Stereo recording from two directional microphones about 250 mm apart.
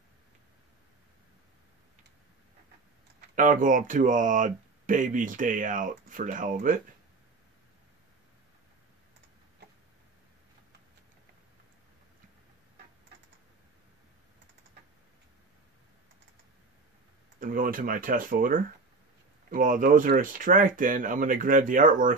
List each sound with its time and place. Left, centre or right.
3.3 s speech: right
17.4 s speech: right